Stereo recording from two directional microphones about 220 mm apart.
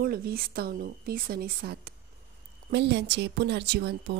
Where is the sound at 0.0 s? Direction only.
40° right (ahead or behind).